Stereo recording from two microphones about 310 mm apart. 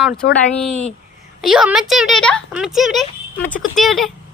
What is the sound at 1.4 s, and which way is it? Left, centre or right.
Speech, centre.